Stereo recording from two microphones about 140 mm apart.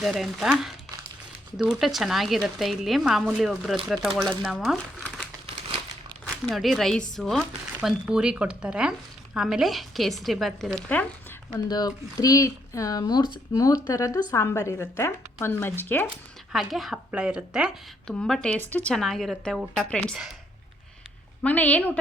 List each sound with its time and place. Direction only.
0.0 s speech: centre (ahead or behind)
6.3 s speech: 5° left (ahead or behind)
11.5 s speech: 30° left (ahead or behind); by 16.0 s 15° left (ahead or behind)
16.5 s speech: centre (ahead or behind)
18.1 s speech: 5° left (ahead or behind)
21.4 s speech: 10° left (ahead or behind)